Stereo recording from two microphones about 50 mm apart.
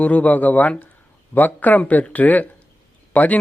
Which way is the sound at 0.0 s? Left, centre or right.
Left.